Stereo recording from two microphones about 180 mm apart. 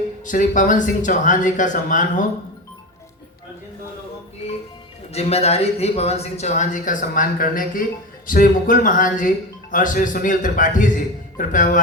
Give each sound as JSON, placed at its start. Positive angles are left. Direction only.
{"t": 0.3, "sound": "speech", "side_deg": 45}
{"t": 5.1, "sound": "speech", "side_deg": 35}